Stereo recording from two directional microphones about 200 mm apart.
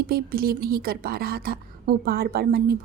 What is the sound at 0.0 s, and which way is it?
A woman's voice, 50° right (ahead or behind).